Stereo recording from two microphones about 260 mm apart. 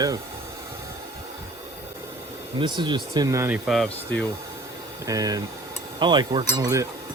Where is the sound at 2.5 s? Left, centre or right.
Centre.